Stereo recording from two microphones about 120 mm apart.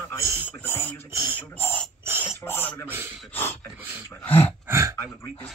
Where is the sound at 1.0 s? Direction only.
20° right (ahead or behind).